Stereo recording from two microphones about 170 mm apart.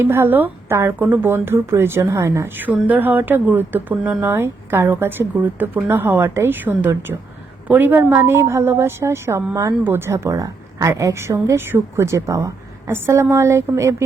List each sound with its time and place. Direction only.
0.0 s a woman's voice: 15° right (ahead or behind)